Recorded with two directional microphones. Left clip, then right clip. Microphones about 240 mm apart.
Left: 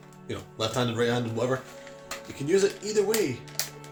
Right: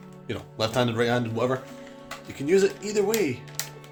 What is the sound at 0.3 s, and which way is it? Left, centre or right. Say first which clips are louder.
A man's voice: right 2 dB; right.